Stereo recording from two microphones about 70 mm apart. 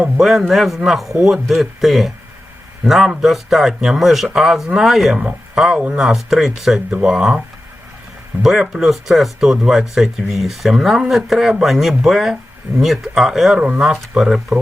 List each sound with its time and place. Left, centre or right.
0.2 s speech: centre
13.6 s speech: centre
13.8 s speech: centre